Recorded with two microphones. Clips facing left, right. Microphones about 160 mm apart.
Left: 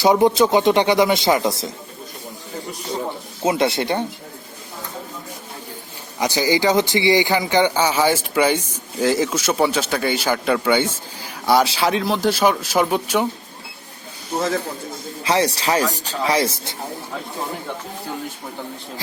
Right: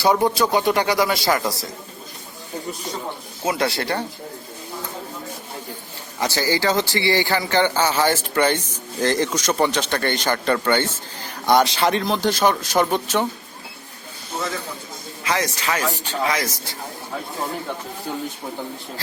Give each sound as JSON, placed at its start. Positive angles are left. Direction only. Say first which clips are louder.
{"t": 0.0, "sound": "a man's voice", "louder": "left 4 dB", "side_deg": 20}
{"t": 3.4, "sound": "a man's voice", "louder": "left 4 dB", "side_deg": 20}
{"t": 6.1, "sound": "speech", "louder": "left 3 dB", "side_deg": 15}
{"t": 14.3, "sound": "speech", "louder": "left 6 dB", "side_deg": 40}
{"t": 15.2, "sound": "speech", "louder": "left 5 dB", "side_deg": 30}